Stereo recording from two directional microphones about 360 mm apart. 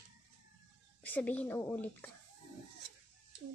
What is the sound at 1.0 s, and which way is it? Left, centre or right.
A woman's voice, centre.